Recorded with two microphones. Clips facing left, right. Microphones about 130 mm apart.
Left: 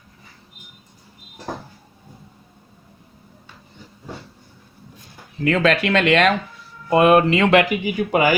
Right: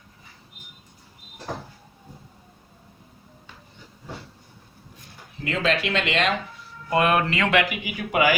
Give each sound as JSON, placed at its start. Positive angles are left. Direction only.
{"t": 5.5, "sound": "speech", "side_deg": 55}
{"t": 6.9, "sound": "speech", "side_deg": 25}
{"t": 7.7, "sound": "speech", "side_deg": 40}